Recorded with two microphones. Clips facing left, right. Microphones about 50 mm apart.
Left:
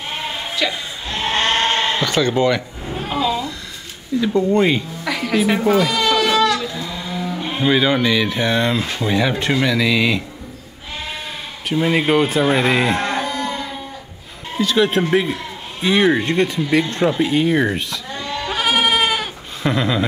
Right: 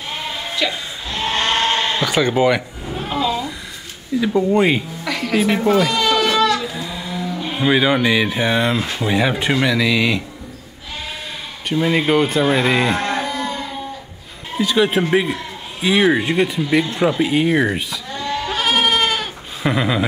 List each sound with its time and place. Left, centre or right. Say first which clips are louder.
0.6 s speech: even; centre
1.1 s sheep: left 1 dB; left
2.0 s speech: right 1 dB; centre
2.8 s a sound: even; centre
4.2 s speech: even; centre
5.0 s bleat: even; centre
6.7 s a sound: even; centre
7.1 s a sound: left 1 dB; centre
7.5 s speech: right 1 dB; centre
11.7 s speech: even; centre
13.0 s moo: even; centre
14.6 s speech: even; centre
18.5 s goat: left 1 dB; centre
19.6 s speech: even; centre